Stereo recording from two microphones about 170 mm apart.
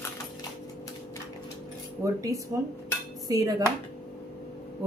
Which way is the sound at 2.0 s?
20° right (ahead or behind).